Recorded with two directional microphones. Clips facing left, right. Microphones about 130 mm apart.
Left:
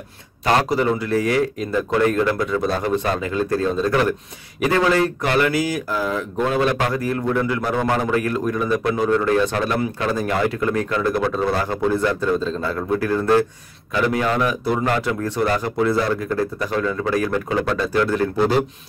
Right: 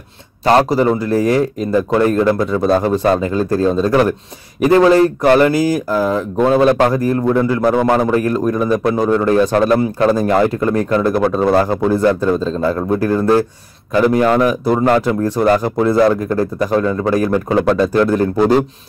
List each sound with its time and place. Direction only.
0.6 s speech: 35° right (ahead or behind)